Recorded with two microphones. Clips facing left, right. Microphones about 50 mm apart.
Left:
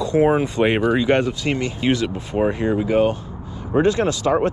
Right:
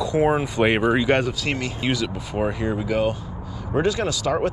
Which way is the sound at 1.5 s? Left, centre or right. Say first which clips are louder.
Left 4 dB; left.